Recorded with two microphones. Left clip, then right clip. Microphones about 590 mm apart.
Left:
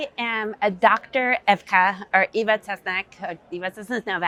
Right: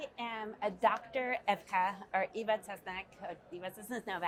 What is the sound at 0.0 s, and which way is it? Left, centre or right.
A woman's voice, left.